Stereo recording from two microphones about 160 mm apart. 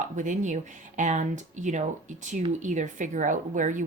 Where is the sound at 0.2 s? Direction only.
50° right (ahead or behind).